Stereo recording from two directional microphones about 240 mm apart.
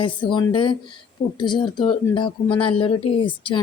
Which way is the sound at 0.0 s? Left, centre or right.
Centre.